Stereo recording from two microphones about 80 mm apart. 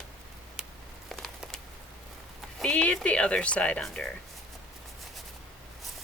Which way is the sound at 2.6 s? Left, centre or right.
Centre.